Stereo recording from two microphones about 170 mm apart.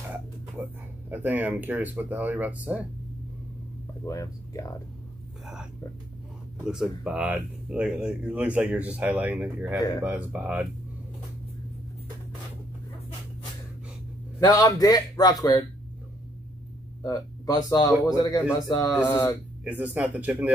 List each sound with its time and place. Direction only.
0.6 s speech: 10° right (ahead or behind)
4.0 s speech: 20° left (ahead or behind)
6.7 s speech: 5° right (ahead or behind)
14.5 s speech: 20° left (ahead or behind)
17.0 s speech: 20° left (ahead or behind)
19.6 s speech: 10° right (ahead or behind)